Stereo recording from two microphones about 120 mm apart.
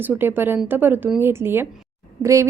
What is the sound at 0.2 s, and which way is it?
A woman's voice, 15° right (ahead or behind).